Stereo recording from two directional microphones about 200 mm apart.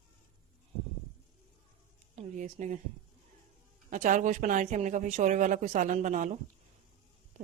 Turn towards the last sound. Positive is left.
turn(degrees=-35)  # may be behind; listen again after turning